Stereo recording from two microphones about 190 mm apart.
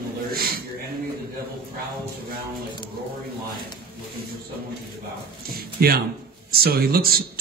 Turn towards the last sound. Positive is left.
turn(degrees=-55)  # may be behind; listen again after turning